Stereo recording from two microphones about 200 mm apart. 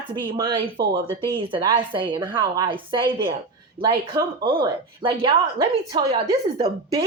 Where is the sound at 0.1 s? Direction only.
20° right (ahead or behind).